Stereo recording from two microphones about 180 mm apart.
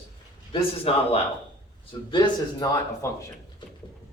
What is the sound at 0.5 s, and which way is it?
A man's voice, 30° left (ahead or behind).